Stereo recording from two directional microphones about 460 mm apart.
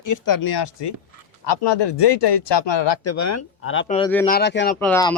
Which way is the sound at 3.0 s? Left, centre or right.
Left.